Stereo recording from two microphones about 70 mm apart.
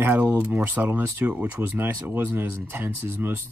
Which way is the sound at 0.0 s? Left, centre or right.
Right.